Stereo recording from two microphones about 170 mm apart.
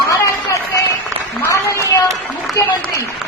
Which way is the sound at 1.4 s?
15° left (ahead or behind).